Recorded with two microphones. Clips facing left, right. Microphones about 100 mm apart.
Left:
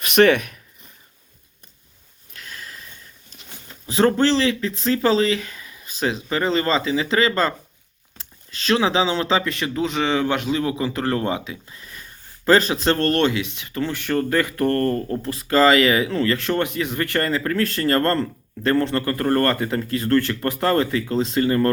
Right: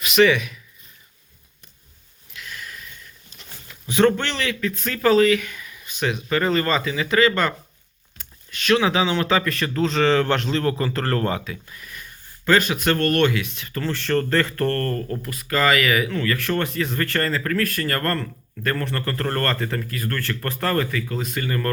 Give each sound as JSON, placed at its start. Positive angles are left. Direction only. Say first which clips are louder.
{"t": 0.0, "sound": "speech", "louder": "left 2 dB", "side_deg": 50}
{"t": 2.3, "sound": "sniff", "louder": "right 1 dB", "side_deg": 35}
{"t": 3.7, "sound": "speech", "louder": "right 1 dB", "side_deg": 30}